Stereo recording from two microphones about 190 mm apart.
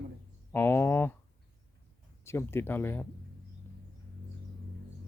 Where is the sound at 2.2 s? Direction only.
15° left (ahead or behind).